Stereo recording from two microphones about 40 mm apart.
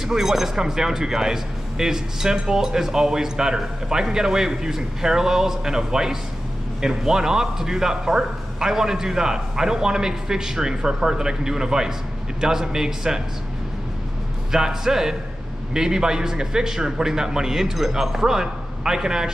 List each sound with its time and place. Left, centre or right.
0.0 s speech: centre
14.5 s speech: centre